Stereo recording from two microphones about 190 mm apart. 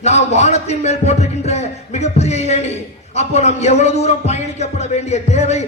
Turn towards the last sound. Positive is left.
turn(degrees=35)  # may be behind; listen again after turning